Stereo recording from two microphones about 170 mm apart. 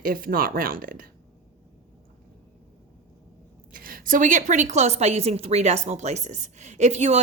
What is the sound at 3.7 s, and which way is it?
A woman's voice, 55° right (ahead or behind).